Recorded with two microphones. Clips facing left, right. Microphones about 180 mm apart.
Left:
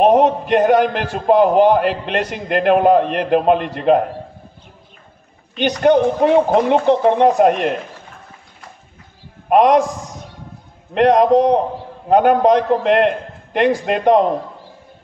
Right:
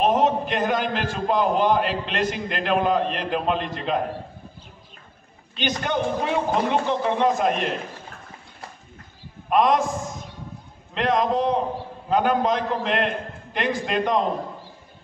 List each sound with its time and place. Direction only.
0.0 s a man's voice: 60° left (ahead or behind)
5.6 s a man's voice: 60° left (ahead or behind)
9.5 s a man's voice: 65° left (ahead or behind)
11.0 s a man's voice: 65° left (ahead or behind)